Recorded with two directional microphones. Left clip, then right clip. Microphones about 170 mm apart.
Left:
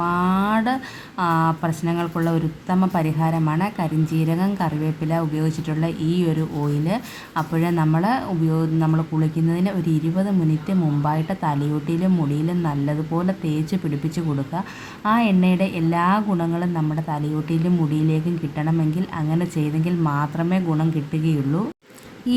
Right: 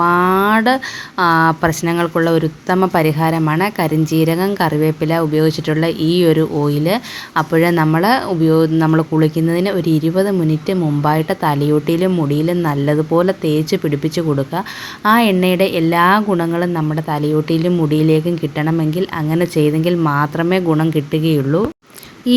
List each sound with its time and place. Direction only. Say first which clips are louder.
0.0 s a sound: right 9 dB; 20° right (ahead or behind)
1.2 s a woman's voice: right 8 dB; 20° right (ahead or behind)
8.9 s a woman's voice: right 10 dB; 25° right (ahead or behind)
15.0 s a woman's voice: right 7 dB; 15° right (ahead or behind)